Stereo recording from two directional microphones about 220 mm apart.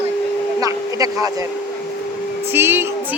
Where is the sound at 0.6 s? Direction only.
15° right (ahead or behind).